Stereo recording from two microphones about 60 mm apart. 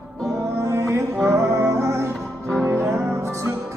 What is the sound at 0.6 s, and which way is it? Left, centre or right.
Music, right.